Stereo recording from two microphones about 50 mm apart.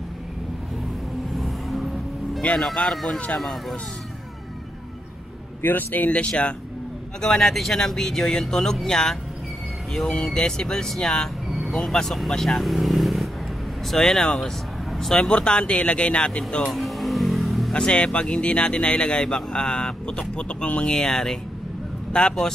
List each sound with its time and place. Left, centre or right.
1.3 s vehicle: centre
2.5 s speech: centre
5.6 s speech: left
6.0 s speech: left
7.2 s speech: centre
10.3 s speech: centre
16.7 s vehicle: centre
17.7 s speech: centre